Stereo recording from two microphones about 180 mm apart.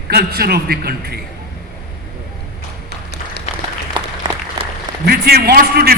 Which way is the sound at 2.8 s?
65° left (ahead or behind).